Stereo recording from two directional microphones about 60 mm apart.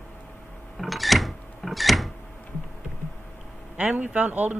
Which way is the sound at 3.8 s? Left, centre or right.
Right.